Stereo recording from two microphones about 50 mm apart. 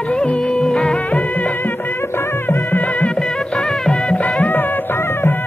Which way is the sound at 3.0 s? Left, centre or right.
Centre.